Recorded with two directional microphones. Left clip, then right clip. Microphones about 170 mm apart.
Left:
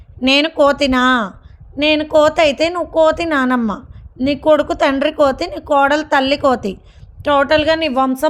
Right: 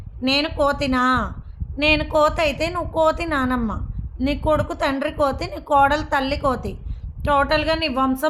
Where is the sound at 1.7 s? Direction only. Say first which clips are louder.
Left 5 dB; 30° left (ahead or behind).